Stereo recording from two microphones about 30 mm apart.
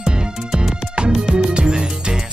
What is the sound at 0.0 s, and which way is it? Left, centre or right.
Music, right.